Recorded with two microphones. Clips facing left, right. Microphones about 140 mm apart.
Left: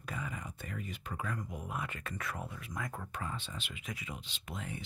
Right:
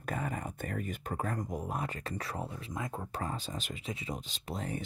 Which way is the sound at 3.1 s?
40° right (ahead or behind).